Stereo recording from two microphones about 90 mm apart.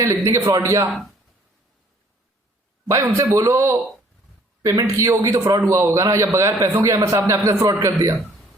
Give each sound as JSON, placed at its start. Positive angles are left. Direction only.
{"t": 0.0, "sound": "a man's voice", "side_deg": -35}
{"t": 2.8, "sound": "a man's voice", "side_deg": -35}